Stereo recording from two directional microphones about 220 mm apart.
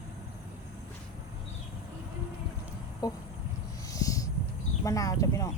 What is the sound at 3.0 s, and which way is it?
Speech, 15° left (ahead or behind).